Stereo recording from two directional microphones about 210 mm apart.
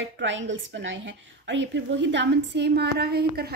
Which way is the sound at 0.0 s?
60° right (ahead or behind).